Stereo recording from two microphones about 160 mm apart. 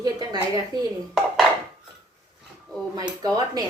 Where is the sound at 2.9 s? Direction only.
25° right (ahead or behind).